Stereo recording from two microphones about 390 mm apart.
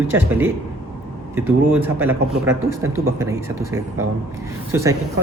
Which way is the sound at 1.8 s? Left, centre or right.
Centre.